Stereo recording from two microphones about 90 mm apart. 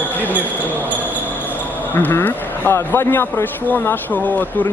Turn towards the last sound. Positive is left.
turn(degrees=25)  # may be behind; listen again after turning